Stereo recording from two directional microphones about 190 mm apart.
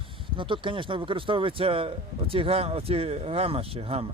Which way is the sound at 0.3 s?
25° right (ahead or behind).